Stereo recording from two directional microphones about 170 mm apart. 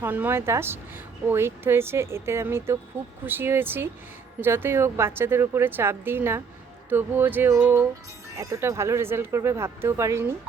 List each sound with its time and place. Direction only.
0.0 s speech: 10° right (ahead or behind)